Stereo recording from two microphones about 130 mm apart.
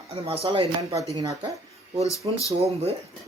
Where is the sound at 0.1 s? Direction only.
45° right (ahead or behind).